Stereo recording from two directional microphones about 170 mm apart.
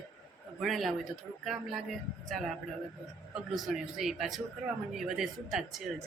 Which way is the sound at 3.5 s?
Centre (ahead or behind).